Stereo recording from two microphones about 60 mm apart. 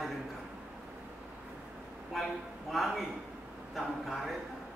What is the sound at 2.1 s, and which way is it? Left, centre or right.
A man's voice, centre.